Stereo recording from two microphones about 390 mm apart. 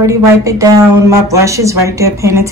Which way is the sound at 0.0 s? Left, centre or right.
Centre.